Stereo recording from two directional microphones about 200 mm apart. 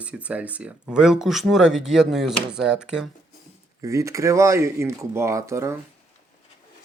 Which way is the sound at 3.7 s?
15° right (ahead or behind).